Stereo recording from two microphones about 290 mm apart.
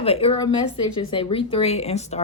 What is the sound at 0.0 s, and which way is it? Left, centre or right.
Speech, centre.